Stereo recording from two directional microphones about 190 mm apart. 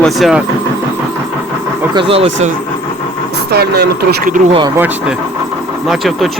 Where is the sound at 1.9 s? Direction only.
25° right (ahead or behind).